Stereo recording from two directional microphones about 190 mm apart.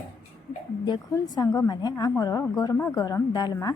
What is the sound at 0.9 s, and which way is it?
A woman's voice, 20° left (ahead or behind).